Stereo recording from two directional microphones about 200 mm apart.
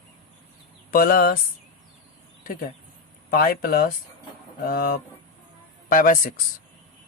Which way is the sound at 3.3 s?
45° left (ahead or behind).